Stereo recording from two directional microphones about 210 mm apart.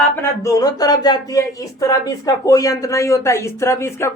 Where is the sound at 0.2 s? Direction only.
15° left (ahead or behind).